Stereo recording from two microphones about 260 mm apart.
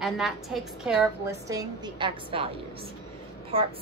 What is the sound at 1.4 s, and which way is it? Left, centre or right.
A woman's voice, centre.